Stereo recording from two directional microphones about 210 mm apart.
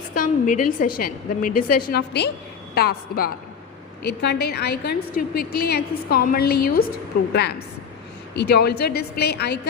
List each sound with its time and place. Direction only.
0.1 s a woman's voice: 40° left (ahead or behind)
8.4 s a woman's voice: 50° left (ahead or behind)